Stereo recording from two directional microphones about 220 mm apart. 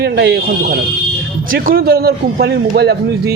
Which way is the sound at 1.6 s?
45° right (ahead or behind).